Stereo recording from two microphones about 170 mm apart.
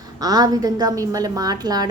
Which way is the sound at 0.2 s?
20° right (ahead or behind).